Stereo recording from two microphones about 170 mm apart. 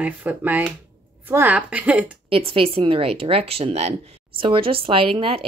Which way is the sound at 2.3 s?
35° right (ahead or behind).